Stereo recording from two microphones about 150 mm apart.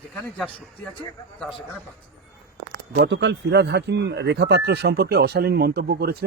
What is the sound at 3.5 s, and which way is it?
Speech, 90° right.